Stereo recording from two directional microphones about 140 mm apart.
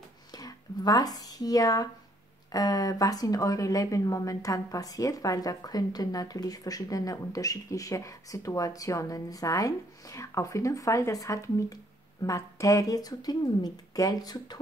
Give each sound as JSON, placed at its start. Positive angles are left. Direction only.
{"t": 0.3, "sound": "a woman's voice", "side_deg": 25}